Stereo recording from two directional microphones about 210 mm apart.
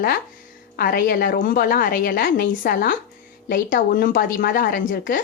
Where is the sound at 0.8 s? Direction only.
45° left (ahead or behind).